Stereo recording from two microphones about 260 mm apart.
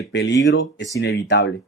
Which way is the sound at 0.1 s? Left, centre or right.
Left.